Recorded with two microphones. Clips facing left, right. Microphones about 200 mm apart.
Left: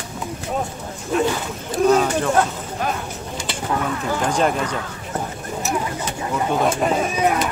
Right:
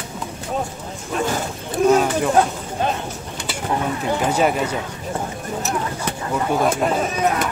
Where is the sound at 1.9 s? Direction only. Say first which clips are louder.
Right 1 dB; 10° right (ahead or behind).